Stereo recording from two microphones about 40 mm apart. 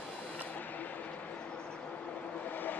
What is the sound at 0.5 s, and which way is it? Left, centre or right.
Vehicle, left.